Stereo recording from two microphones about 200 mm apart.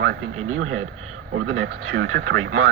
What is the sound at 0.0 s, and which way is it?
Speech, 75° right (ahead or behind).